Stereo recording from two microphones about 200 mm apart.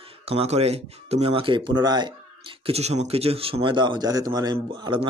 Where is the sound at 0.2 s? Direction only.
30° right (ahead or behind).